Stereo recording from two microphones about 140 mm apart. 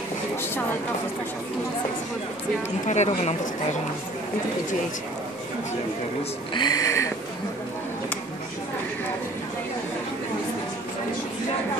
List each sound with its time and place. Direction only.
2.9 s a woman's voice: 55° left (ahead or behind)
6.5 s speech: 30° left (ahead or behind)